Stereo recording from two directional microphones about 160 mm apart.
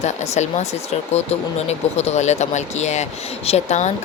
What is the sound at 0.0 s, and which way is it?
Speech, 45° left (ahead or behind).